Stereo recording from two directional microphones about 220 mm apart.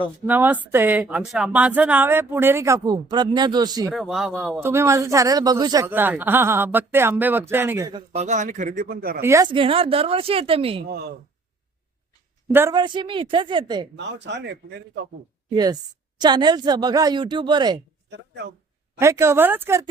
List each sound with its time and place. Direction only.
0.3 s speech: 10° right (ahead or behind)
3.9 s speech: centre (ahead or behind)
4.6 s speech: 10° right (ahead or behind); by 9.2 s 45° right (ahead or behind)
9.2 s speech: 15° right (ahead or behind)
12.5 s speech: 10° right (ahead or behind)
12.8 s speech: 20° right (ahead or behind)
13.9 s speech: 55° right (ahead or behind)
15.5 s speech: 15° right (ahead or behind)
18.9 s speech: 10° right (ahead or behind)